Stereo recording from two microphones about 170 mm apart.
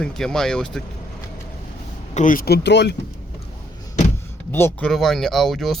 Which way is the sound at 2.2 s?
55° left (ahead or behind).